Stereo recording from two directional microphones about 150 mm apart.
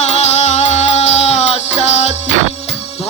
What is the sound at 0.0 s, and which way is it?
Music, 50° left (ahead or behind).